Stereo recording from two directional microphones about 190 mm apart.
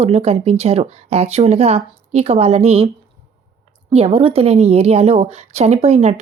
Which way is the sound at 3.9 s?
30° right (ahead or behind).